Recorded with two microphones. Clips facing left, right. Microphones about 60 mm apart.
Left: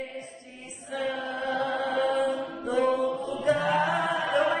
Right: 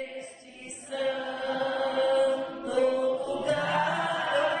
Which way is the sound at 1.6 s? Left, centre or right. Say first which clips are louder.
Right 1 dB; left.